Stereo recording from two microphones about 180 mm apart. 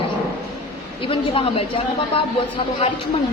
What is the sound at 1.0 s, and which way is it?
Speech, 30° left (ahead or behind).